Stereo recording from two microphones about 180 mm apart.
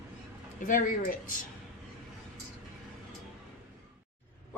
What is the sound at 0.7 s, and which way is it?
Speech, 50° left (ahead or behind).